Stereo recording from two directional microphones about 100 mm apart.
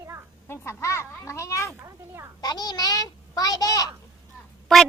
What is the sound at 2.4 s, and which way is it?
A child's voice, 40° left (ahead or behind).